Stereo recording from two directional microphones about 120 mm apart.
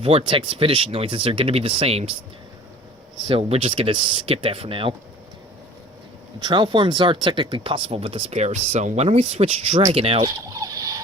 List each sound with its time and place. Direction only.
0.0 s speech: 50° right (ahead or behind)
3.2 s speech: 50° right (ahead or behind)
6.4 s speech: 40° right (ahead or behind)
10.2 s fowl: 35° right (ahead or behind)